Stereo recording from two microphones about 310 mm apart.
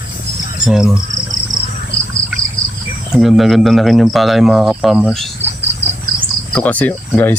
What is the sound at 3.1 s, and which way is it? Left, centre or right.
Speech, centre.